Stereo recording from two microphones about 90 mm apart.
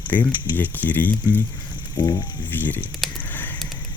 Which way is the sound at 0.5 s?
20° left (ahead or behind).